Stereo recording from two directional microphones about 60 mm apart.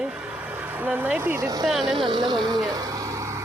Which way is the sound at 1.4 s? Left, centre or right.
Right.